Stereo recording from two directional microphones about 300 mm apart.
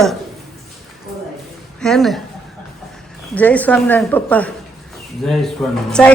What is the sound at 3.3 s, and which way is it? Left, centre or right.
A woman's voice, centre.